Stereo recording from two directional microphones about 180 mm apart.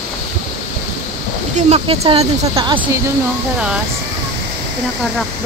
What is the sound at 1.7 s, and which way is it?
Speech, 35° right (ahead or behind).